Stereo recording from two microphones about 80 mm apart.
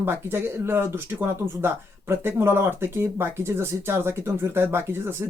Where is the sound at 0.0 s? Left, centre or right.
Right.